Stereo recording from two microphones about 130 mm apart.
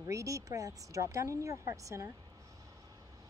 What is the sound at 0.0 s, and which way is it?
Speech, 25° right (ahead or behind).